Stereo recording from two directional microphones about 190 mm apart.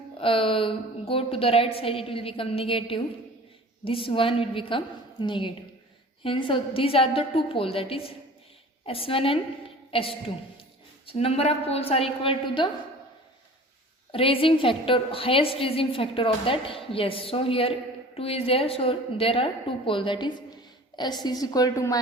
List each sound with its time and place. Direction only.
0.2 s a woman's voice: 30° left (ahead or behind)
14.1 s a woman's voice: 30° left (ahead or behind)